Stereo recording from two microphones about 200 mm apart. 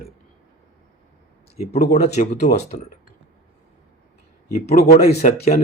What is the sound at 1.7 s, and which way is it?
Speech, 50° left (ahead or behind).